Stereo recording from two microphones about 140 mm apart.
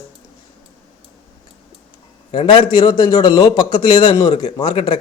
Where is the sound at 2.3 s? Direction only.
35° left (ahead or behind).